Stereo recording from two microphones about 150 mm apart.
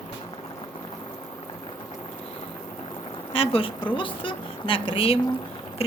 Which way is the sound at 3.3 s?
40° left (ahead or behind).